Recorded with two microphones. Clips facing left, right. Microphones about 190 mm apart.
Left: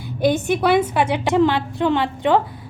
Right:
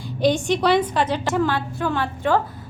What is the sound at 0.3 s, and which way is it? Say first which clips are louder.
A woman's voice: left 1 dB; 5° left (ahead or behind).